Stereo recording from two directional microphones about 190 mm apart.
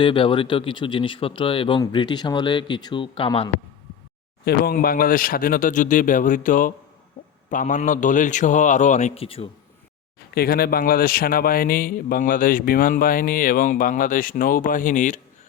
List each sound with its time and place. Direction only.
0.0 s speech: 25° left (ahead or behind)
4.4 s a man's voice: 50° left (ahead or behind)
7.2 s a sound: 45° left (ahead or behind)
7.5 s a man's voice: 40° left (ahead or behind)
10.3 s a man's voice: 55° left (ahead or behind)